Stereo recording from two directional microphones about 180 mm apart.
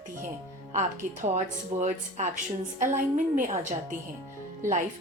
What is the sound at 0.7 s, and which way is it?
A woman's voice, 40° right (ahead or behind).